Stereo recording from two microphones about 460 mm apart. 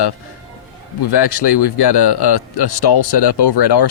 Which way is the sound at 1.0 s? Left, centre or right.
Left.